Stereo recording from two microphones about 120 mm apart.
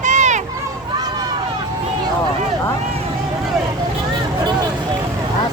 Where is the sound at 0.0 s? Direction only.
85° right.